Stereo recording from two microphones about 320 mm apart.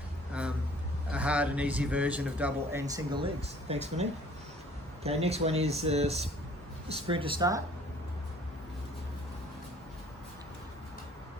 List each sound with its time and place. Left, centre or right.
1.1 s speech: centre
5.0 s speech: centre